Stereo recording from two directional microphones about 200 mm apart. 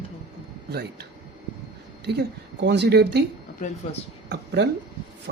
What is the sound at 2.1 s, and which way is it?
A woman's voice, 55° right (ahead or behind).